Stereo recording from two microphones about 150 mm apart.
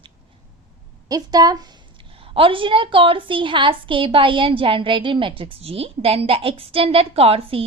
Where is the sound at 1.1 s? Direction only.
25° right (ahead or behind).